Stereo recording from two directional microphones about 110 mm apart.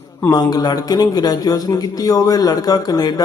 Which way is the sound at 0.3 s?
35° left (ahead or behind).